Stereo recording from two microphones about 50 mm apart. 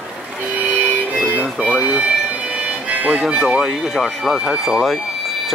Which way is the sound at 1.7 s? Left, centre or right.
Right.